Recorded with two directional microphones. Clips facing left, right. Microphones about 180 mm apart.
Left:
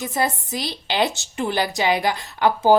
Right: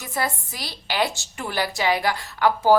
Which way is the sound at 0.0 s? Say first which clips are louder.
Left 4 dB; 20° left (ahead or behind).